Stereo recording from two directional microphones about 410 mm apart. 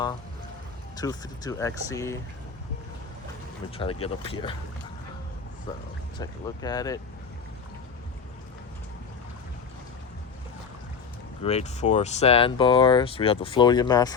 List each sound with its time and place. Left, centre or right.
0.9 s speech: centre
4.0 s speech: centre
6.1 s speech: centre
11.4 s speech: centre